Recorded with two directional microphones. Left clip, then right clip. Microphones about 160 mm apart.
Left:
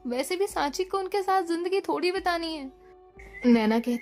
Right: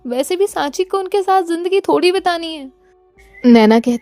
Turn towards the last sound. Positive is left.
turn(degrees=-60)  # may be behind; listen again after turning